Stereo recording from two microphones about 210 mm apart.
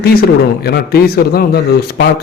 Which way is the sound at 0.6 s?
50° left (ahead or behind).